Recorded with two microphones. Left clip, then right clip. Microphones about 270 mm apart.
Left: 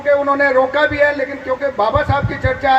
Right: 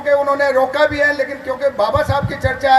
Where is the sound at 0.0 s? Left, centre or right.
Right.